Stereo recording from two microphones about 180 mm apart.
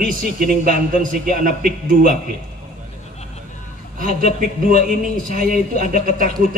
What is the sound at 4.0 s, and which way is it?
Speech, 50° right (ahead or behind).